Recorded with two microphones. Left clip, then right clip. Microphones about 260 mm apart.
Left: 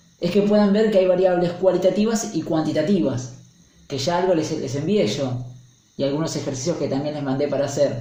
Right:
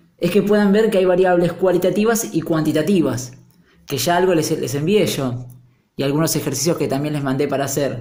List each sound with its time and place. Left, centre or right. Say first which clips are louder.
0.2 s speech: right 2 dB; right